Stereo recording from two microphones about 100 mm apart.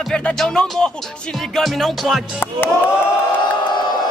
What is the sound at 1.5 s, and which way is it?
Speech, centre (ahead or behind).